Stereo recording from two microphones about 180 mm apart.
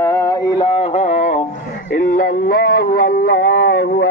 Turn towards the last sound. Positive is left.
turn(degrees=70)  # may be behind; listen again after turning